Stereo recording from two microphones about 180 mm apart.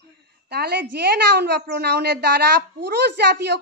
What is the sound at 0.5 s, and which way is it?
A child's voice, 65° right (ahead or behind).